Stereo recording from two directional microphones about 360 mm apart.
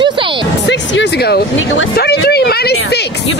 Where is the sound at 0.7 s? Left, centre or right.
Left.